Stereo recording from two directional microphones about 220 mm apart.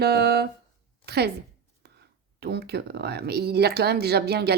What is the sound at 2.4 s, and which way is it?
Speech, 45° right (ahead or behind).